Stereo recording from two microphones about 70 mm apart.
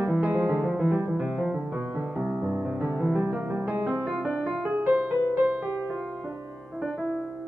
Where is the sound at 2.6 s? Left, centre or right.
Centre.